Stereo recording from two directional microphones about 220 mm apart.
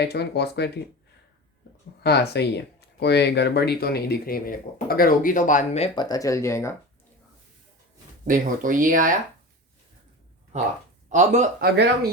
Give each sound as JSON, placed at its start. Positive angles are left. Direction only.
{"t": 0.0, "sound": "speech", "side_deg": 50}
{"t": 2.0, "sound": "speech", "side_deg": 50}
{"t": 8.3, "sound": "speech", "side_deg": -35}
{"t": 11.1, "sound": "speech", "side_deg": -35}